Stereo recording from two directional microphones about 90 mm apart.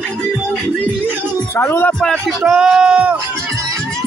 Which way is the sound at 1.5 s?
25° left (ahead or behind).